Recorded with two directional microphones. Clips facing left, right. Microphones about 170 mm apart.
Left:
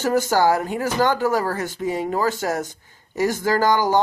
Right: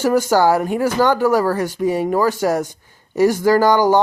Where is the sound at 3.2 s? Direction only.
15° right (ahead or behind).